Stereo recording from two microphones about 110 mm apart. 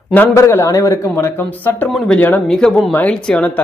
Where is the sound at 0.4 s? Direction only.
25° left (ahead or behind).